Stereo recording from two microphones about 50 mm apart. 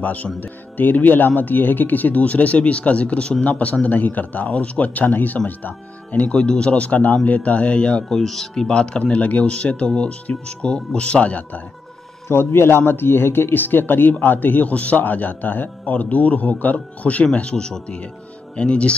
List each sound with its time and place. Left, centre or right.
0.0 s speech: left
6.3 s a man's voice: centre
8.1 s a man's voice: centre; by 11.6 s left
12.3 s a man's voice: left